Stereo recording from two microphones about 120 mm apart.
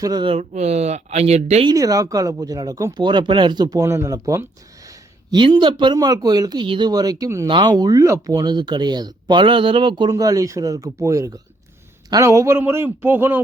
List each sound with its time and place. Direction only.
0.0 s speech: 35° right (ahead or behind)
0.3 s speech: 60° right (ahead or behind)
1.7 s speech: 30° right (ahead or behind)
5.3 s speech: 40° right (ahead or behind); by 8.4 s 25° right (ahead or behind)
8.4 s speech: 40° right (ahead or behind)
10.1 s speech: 30° right (ahead or behind)